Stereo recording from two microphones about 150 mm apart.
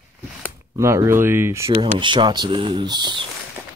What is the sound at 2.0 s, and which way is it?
Speech, 30° right (ahead or behind).